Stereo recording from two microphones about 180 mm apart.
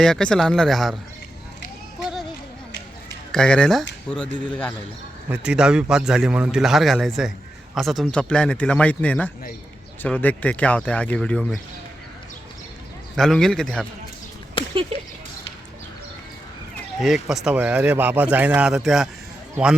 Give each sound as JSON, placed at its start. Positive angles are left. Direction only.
{"t": 0.0, "sound": "a man's voice", "side_deg": 5}
{"t": 2.0, "sound": "a sound", "side_deg": -5}
{"t": 3.3, "sound": "a man's voice", "side_deg": 5}
{"t": 5.3, "sound": "a man's voice", "side_deg": -5}
{"t": 13.1, "sound": "a man's voice", "side_deg": 0}
{"t": 14.6, "sound": "a sound", "side_deg": 30}
{"t": 14.9, "sound": "speech", "side_deg": -35}
{"t": 17.2, "sound": "speech", "side_deg": -5}